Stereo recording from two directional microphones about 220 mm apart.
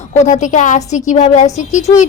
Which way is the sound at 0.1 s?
30° left (ahead or behind).